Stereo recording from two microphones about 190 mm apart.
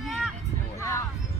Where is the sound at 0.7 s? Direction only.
15° left (ahead or behind).